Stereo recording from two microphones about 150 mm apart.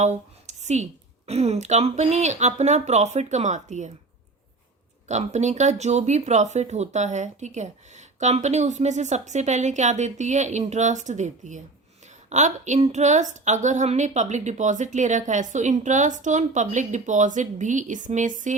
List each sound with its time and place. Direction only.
0.0 s a sound: 50° right (ahead or behind)
1.3 s speech: 45° right (ahead or behind)
5.0 s speech: 50° right (ahead or behind)